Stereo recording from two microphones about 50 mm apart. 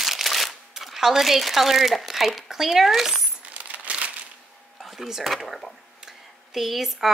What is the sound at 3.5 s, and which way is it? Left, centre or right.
Crumpling, right.